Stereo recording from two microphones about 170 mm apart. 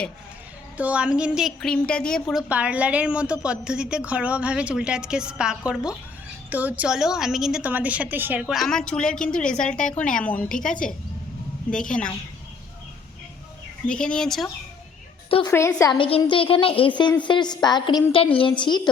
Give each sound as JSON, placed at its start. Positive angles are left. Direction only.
{"t": 0.8, "sound": "a woman's voice", "side_deg": -5}
{"t": 2.5, "sound": "a woman's voice", "side_deg": -5}
{"t": 13.8, "sound": "a woman's voice", "side_deg": 5}
{"t": 15.3, "sound": "a woman's voice", "side_deg": 30}
{"t": 15.5, "sound": "a woman's voice", "side_deg": 15}
{"t": 16.0, "sound": "a woman's voice", "side_deg": 30}